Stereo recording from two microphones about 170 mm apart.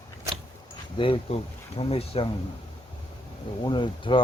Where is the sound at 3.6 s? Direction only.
30° left (ahead or behind).